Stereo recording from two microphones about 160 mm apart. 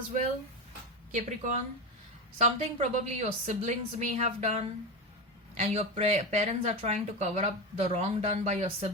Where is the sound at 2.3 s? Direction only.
40° right (ahead or behind).